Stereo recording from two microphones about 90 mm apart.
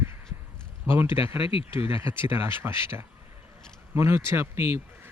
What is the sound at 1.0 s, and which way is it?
Speech, 70° left (ahead or behind).